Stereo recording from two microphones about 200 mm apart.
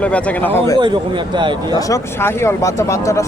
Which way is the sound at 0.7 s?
25° right (ahead or behind).